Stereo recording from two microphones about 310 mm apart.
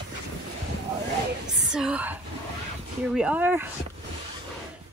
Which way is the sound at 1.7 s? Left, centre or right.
Centre.